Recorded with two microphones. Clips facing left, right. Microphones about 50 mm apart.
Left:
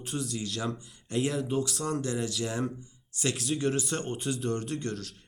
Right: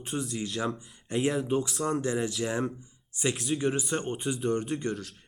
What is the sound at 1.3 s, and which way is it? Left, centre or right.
Speech, centre.